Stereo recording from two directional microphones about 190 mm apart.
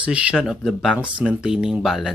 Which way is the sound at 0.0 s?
5° right (ahead or behind).